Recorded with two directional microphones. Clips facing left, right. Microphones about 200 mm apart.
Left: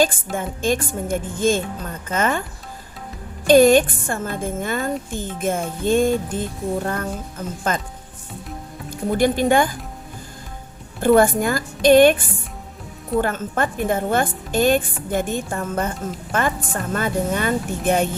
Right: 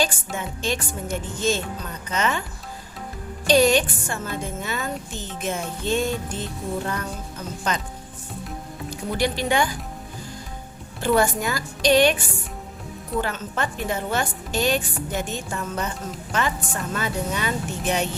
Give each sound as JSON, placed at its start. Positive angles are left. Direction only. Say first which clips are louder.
{"t": 0.3, "sound": "a woman's voice", "louder": "left 6 dB", "side_deg": 50}
{"t": 3.4, "sound": "a woman's voice", "louder": "left 6 dB", "side_deg": 50}
{"t": 9.1, "sound": "a woman's voice", "louder": "left 6 dB", "side_deg": 50}
{"t": 11.0, "sound": "a woman's voice", "louder": "left 6 dB", "side_deg": 50}